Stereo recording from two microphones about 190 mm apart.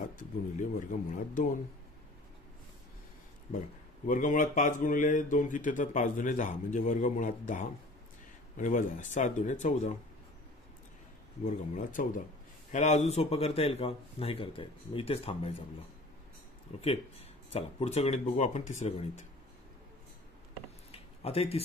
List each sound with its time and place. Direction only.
0.0 s speech: 40° left (ahead or behind)
4.1 s speech: 45° left (ahead or behind)
11.4 s speech: 40° left (ahead or behind)
16.7 s speech: 35° left (ahead or behind)
20.9 s a sound: 30° left (ahead or behind)